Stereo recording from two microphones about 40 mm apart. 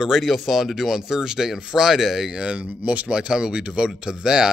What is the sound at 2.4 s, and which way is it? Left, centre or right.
Speech, right.